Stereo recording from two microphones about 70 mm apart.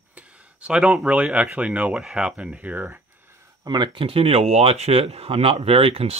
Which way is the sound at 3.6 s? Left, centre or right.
Right.